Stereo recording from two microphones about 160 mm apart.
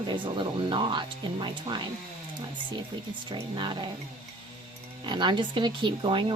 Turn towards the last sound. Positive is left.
turn(degrees=-30)  # may be behind; listen again after turning